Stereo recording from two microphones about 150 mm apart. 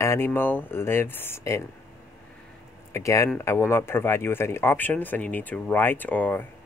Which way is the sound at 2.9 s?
20° left (ahead or behind).